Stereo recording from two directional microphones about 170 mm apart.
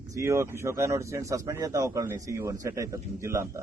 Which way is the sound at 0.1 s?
15° right (ahead or behind).